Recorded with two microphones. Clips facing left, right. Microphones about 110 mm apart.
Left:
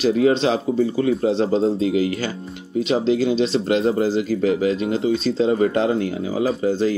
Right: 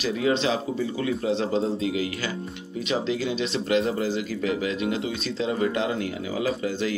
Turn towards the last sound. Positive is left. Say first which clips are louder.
# left 7 dB
turn(degrees=35)  # may be behind; listen again after turning